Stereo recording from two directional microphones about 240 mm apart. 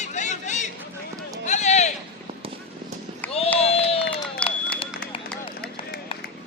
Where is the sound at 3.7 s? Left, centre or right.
Left.